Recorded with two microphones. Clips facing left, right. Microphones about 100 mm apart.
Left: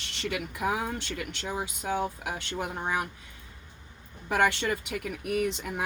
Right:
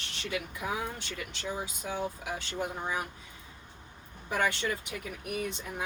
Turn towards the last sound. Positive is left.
turn(degrees=75)  # may be behind; listen again after turning